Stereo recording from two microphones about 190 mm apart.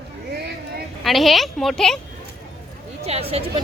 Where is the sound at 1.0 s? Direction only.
Centre (ahead or behind).